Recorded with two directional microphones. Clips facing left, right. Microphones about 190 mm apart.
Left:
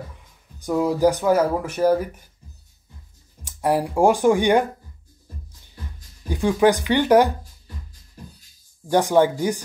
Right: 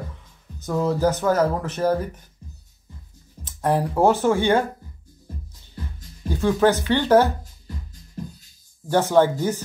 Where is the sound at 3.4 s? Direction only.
10° left (ahead or behind).